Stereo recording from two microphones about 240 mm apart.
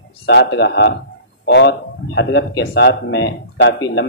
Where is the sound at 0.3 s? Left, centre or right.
Left.